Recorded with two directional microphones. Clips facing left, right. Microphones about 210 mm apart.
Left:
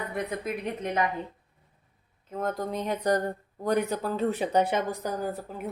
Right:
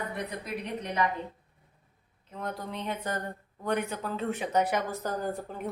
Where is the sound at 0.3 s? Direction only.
50° left (ahead or behind).